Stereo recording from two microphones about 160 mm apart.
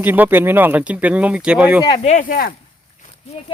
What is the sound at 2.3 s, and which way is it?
Speech, 65° left (ahead or behind).